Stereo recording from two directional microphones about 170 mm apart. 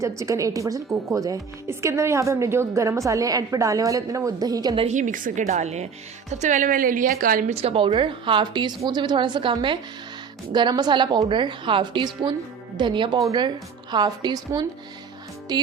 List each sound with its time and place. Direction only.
0.2 s a woman's voice: 20° right (ahead or behind)
4.9 s a woman's voice: 50° right (ahead or behind)
7.5 s a woman's voice: 35° right (ahead or behind)